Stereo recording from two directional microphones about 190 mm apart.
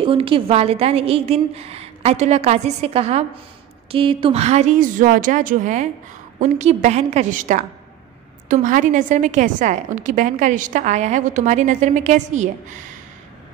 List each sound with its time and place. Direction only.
0.0 s a woman's voice: 25° right (ahead or behind)